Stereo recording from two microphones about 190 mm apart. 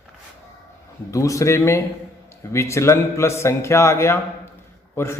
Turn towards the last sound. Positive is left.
turn(degrees=15)  # may be behind; listen again after turning